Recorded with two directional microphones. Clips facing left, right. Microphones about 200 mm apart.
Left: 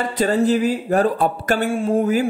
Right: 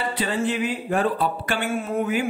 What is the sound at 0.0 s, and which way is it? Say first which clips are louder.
Speech: left 6 dB; 40° left (ahead or behind).